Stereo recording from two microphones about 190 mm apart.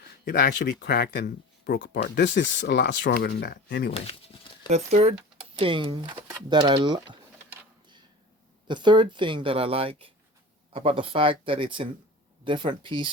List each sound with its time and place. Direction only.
0.3 s speech: 55° left (ahead or behind)
3.9 s speech: 30° left (ahead or behind)
4.7 s speech: 35° right (ahead or behind)
8.6 s speech: 25° right (ahead or behind)